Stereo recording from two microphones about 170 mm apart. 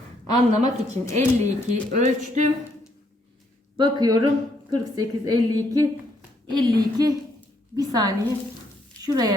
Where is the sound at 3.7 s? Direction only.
25° right (ahead or behind).